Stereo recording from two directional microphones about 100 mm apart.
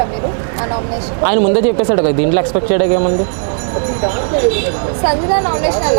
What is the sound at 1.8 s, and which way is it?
Speech, 25° right (ahead or behind).